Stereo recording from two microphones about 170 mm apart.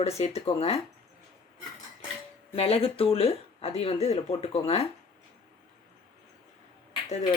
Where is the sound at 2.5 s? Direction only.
35° left (ahead or behind).